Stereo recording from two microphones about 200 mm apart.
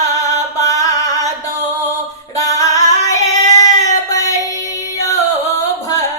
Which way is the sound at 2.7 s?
15° left (ahead or behind).